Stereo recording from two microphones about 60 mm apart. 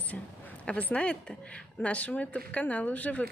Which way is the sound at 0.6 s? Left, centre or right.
Left.